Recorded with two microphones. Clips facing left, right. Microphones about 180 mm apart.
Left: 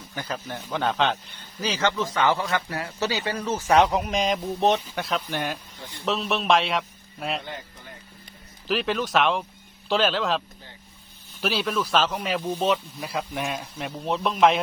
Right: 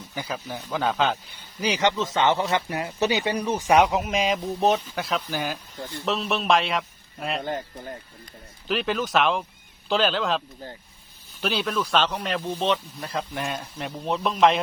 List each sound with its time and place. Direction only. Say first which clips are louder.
0.1 s a man's voice: even; 5° right (ahead or behind)
7.4 s speech: right 8 dB; 45° right (ahead or behind)
8.6 s speech: even; centre (ahead or behind)